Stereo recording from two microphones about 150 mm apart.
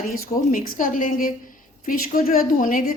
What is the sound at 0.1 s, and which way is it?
A woman's voice, 65° left (ahead or behind).